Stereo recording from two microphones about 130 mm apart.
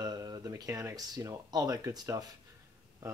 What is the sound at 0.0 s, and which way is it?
Speech, 30° right (ahead or behind).